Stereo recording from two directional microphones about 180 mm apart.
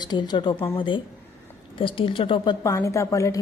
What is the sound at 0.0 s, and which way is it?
Speech, 25° left (ahead or behind).